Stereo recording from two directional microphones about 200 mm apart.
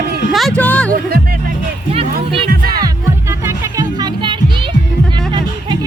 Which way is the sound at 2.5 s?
50° right (ahead or behind).